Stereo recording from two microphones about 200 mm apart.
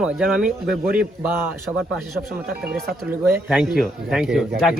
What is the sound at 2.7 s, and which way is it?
Speech, 55° right (ahead or behind).